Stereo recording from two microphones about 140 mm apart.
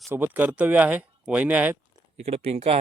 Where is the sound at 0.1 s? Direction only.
15° right (ahead or behind).